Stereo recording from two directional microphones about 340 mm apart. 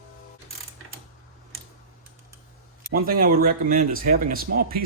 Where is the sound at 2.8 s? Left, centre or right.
Right.